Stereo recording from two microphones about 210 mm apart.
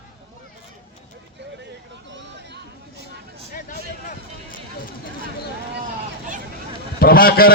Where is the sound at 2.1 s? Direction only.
55° right (ahead or behind).